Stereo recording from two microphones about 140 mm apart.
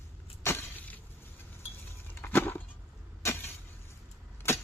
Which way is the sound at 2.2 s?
15° left (ahead or behind).